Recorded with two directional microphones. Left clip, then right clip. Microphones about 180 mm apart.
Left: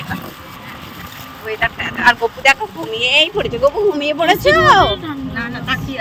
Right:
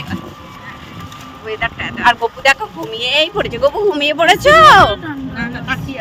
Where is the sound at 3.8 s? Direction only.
20° right (ahead or behind).